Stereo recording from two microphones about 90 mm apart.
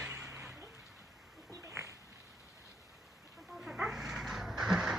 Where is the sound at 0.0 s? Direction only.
10° right (ahead or behind).